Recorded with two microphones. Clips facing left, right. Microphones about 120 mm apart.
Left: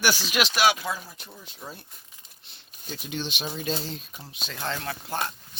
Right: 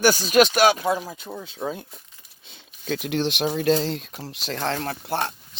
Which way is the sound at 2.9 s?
85° right.